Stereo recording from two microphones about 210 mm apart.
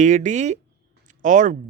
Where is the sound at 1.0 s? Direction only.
35° right (ahead or behind).